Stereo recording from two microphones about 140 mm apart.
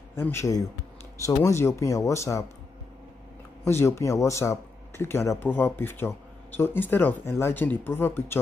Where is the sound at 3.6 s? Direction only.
20° left (ahead or behind).